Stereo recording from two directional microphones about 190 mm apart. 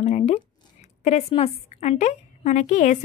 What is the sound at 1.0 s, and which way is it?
A woman's voice, 35° left (ahead or behind).